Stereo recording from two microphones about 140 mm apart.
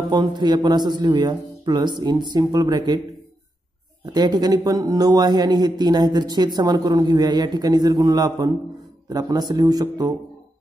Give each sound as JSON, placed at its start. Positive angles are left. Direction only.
{"t": 0.1, "sound": "a man's voice", "side_deg": -30}
{"t": 4.0, "sound": "speech", "side_deg": -30}